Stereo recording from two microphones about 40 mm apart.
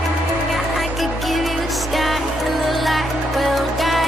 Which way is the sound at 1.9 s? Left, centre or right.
Centre.